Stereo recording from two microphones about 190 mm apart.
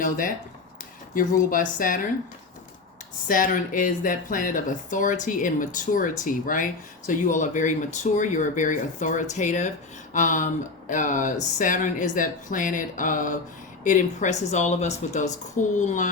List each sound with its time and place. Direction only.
0.0 s speech: 45° left (ahead or behind)
3.2 s speech: 45° left (ahead or behind)